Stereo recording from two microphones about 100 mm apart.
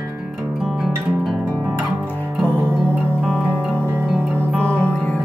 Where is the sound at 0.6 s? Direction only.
Centre (ahead or behind).